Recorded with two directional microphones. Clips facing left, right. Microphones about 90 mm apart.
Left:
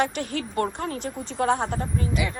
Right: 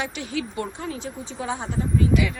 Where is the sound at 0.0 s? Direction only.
50° left (ahead or behind).